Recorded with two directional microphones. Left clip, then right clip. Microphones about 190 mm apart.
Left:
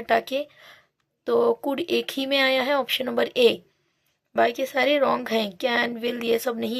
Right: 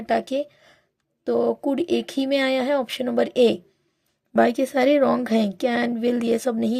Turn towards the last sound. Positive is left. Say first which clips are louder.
# right 1 dB
turn(degrees=-30)  # may be behind; listen again after turning